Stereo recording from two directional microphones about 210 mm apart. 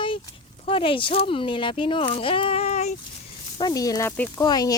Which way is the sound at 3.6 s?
20° left (ahead or behind).